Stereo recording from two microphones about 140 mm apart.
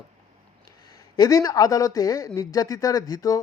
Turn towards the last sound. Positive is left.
turn(degrees=25)  # may be behind; listen again after turning